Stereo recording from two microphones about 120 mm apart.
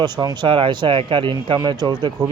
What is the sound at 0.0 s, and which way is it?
Speech, 35° right (ahead or behind).